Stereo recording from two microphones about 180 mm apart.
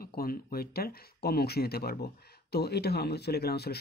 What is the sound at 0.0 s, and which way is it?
Speech, 55° left (ahead or behind).